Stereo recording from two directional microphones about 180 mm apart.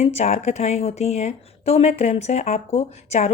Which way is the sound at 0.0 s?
35° left (ahead or behind).